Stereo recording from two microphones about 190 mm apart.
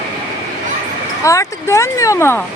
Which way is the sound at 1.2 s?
15° left (ahead or behind).